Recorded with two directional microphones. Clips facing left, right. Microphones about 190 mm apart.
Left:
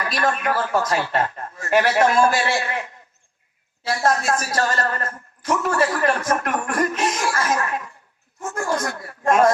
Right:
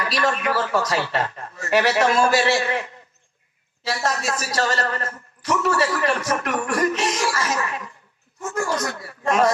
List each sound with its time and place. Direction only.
0.0 s a woman's voice: 50° left (ahead or behind)
3.8 s a woman's voice: 50° left (ahead or behind)